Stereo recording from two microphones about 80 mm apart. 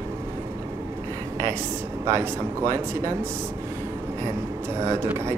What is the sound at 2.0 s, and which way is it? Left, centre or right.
Speech, right.